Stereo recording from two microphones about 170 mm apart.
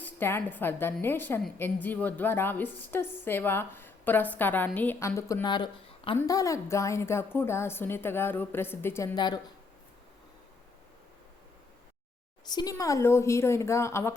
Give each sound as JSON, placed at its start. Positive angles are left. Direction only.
{"t": 0.0, "sound": "a woman's voice", "side_deg": 15}
{"t": 9.1, "sound": "speech", "side_deg": 25}
{"t": 12.5, "sound": "a woman's voice", "side_deg": 25}